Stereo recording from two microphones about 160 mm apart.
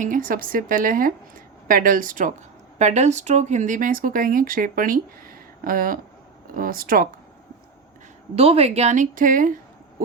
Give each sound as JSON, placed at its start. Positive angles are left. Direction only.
{"t": 0.0, "sound": "speech", "side_deg": -60}
{"t": 2.7, "sound": "speech", "side_deg": -45}
{"t": 8.4, "sound": "speech", "side_deg": -40}